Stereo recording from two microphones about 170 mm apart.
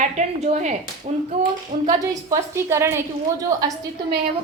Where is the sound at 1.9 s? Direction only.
20° right (ahead or behind).